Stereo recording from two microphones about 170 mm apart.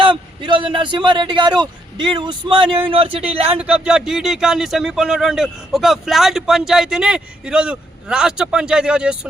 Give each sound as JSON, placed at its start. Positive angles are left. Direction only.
{"t": 0.0, "sound": "speech", "side_deg": -30}
{"t": 3.6, "sound": "speech", "side_deg": -5}